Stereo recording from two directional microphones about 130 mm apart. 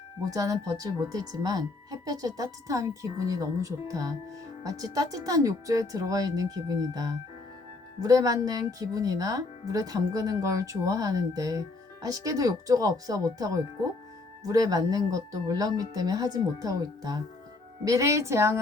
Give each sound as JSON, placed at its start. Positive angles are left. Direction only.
{"t": 0.3, "sound": "speech", "side_deg": -25}